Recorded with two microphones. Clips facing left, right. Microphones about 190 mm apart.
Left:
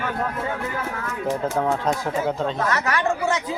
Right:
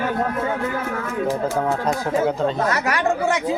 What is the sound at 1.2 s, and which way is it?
Speech, 5° right (ahead or behind).